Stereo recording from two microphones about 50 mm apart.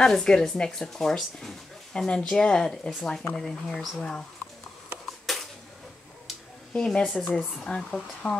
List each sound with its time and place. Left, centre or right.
0.0 s speech: centre
5.2 s a sound: centre
6.7 s speech: centre